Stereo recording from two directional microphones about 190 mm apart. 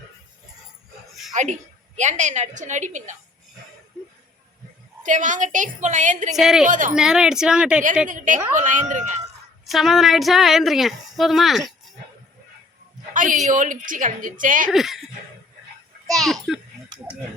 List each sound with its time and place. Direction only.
1.3 s a sound: 40° right (ahead or behind)
2.0 s a woman's voice: 40° right (ahead or behind)
5.0 s a woman's voice: 40° right (ahead or behind)
6.3 s speech: centre (ahead or behind)
6.7 s a woman's voice: 45° right (ahead or behind)
6.9 s speech: 5° right (ahead or behind)
8.0 s a woman's voice: 45° right (ahead or behind)
9.6 s a woman's voice: centre (ahead or behind)
13.1 s a woman's voice: 40° right (ahead or behind)
14.7 s speech: centre (ahead or behind)
16.0 s a child's voice: centre (ahead or behind)